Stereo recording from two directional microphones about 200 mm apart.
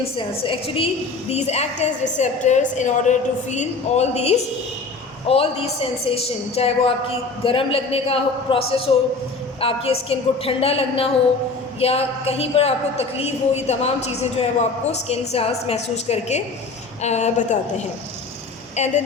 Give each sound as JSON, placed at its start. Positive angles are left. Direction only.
{"t": 0.2, "sound": "a woman's voice", "side_deg": 25}
{"t": 18.8, "sound": "a woman's voice", "side_deg": 35}